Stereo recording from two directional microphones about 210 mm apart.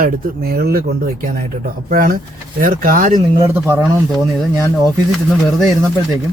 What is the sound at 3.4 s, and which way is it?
Speech, 15° right (ahead or behind).